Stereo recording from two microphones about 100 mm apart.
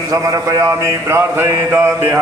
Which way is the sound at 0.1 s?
35° right (ahead or behind).